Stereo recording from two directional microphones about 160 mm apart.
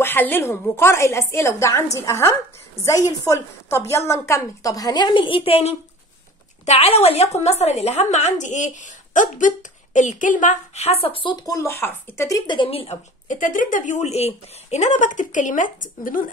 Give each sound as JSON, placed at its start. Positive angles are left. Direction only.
{"t": 0.0, "sound": "a woman's voice", "side_deg": 15}
{"t": 13.3, "sound": "speech", "side_deg": 55}